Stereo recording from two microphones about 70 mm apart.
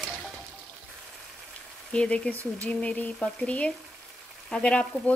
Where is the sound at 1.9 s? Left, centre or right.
Centre.